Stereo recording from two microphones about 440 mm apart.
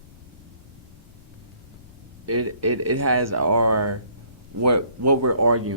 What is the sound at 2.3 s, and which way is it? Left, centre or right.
Speech, right.